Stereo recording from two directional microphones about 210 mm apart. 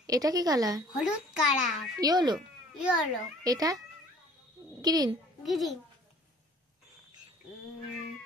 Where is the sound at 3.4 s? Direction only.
15° right (ahead or behind).